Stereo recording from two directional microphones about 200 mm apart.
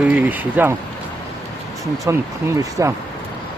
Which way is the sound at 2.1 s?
15° right (ahead or behind).